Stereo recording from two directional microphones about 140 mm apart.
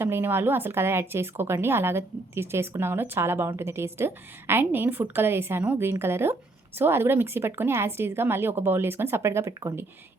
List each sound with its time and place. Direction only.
0.0 s speech: 15° right (ahead or behind)